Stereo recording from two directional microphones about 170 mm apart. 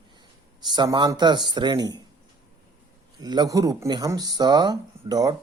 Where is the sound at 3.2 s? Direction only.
25° right (ahead or behind).